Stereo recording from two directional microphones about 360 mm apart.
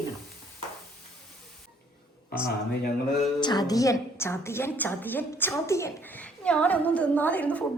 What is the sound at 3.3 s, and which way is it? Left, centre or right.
A woman's voice, centre.